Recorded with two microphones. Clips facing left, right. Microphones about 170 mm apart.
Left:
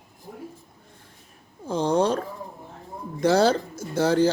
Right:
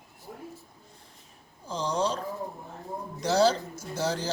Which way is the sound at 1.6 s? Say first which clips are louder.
Left 7 dB; 60° left (ahead or behind).